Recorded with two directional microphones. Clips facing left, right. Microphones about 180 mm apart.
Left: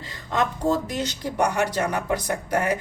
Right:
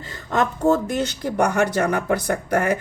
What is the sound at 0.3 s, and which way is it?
Speech, 45° right (ahead or behind).